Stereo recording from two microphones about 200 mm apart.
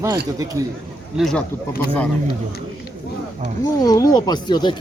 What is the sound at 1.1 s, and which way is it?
Speech, 5° left (ahead or behind).